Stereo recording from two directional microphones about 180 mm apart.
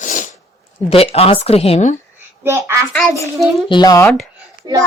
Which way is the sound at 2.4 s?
15° right (ahead or behind).